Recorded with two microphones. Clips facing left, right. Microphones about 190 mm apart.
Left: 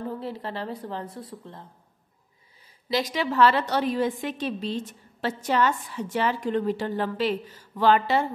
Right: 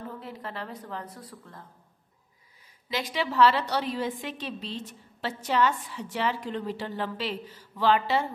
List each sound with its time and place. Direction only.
0.2 s a woman's voice: 30° left (ahead or behind)
2.9 s a woman's voice: 40° left (ahead or behind)